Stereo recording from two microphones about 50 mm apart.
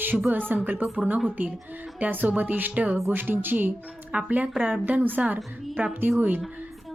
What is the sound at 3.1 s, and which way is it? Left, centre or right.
A woman's voice, right.